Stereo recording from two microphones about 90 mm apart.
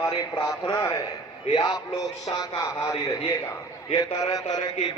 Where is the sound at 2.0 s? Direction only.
40° left (ahead or behind).